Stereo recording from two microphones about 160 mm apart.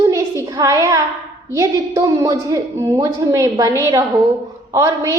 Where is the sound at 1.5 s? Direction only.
20° right (ahead or behind).